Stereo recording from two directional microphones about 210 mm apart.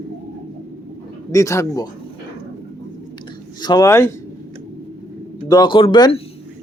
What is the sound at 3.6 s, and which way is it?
Speech, 20° left (ahead or behind).